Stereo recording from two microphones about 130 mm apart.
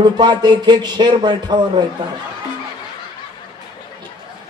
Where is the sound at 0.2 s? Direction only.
35° right (ahead or behind).